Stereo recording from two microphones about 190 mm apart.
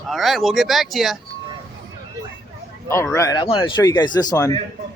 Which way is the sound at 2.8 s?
15° left (ahead or behind).